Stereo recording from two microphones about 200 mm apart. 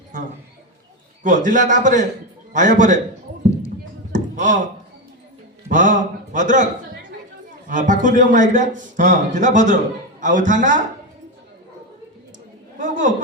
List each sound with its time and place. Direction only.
1.2 s a man's voice: 40° right (ahead or behind)
4.1 s a sound: 40° right (ahead or behind)
5.6 s a man's voice: 40° right (ahead or behind)
7.7 s a man's voice: 40° right (ahead or behind)
12.8 s a man's voice: 40° right (ahead or behind)